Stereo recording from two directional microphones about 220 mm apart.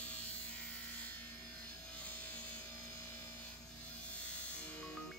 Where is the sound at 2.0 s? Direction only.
5° left (ahead or behind).